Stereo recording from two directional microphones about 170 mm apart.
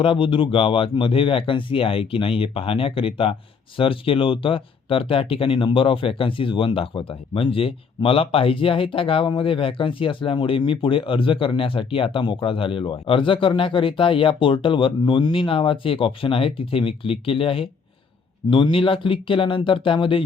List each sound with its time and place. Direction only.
0.0 s speech: 30° left (ahead or behind)